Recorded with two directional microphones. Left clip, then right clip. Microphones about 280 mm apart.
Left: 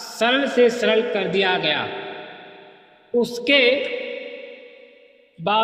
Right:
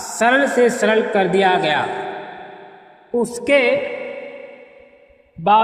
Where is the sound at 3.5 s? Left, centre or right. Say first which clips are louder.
Right 1 dB; right.